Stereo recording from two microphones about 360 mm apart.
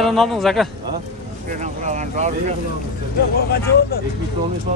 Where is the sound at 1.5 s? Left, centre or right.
Centre.